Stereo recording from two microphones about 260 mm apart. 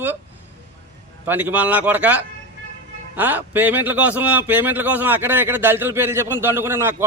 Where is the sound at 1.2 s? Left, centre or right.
Centre.